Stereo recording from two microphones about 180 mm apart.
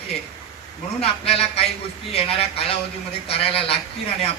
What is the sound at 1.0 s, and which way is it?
Speech, 35° left (ahead or behind).